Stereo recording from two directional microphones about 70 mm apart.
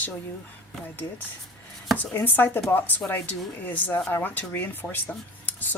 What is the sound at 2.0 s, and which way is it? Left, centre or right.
Speech, left.